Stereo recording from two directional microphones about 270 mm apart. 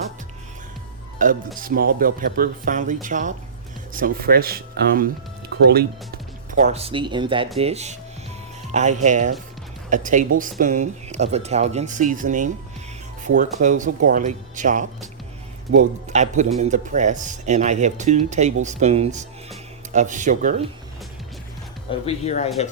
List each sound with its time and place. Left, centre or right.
1.2 s speech: right
6.5 s speech: right
22.0 s speech: left